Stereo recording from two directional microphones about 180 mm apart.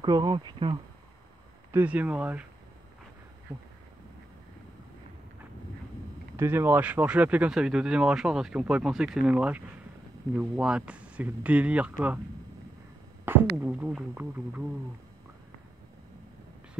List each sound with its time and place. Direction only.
0.0 s speech: 25° right (ahead or behind)
1.7 s speech: 10° right (ahead or behind)
3.5 s speech: 20° right (ahead or behind)
6.3 s speech: 15° right (ahead or behind)
13.2 s speech: 10° right (ahead or behind)